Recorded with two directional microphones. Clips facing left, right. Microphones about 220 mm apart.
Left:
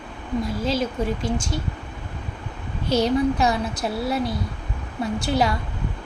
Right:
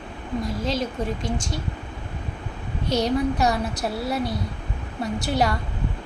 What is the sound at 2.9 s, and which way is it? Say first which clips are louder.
A woman's voice: left 2 dB; centre (ahead or behind).